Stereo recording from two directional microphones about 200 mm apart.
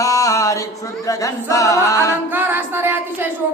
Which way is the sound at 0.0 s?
15° left (ahead or behind).